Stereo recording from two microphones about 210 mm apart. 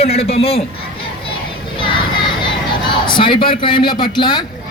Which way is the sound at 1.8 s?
20° left (ahead or behind).